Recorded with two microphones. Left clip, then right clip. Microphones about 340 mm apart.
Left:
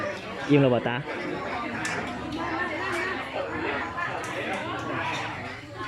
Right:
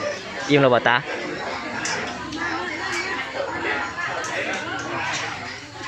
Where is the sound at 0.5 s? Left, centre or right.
Right.